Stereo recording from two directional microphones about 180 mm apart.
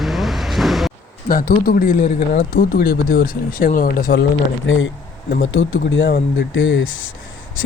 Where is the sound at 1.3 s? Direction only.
55° left (ahead or behind).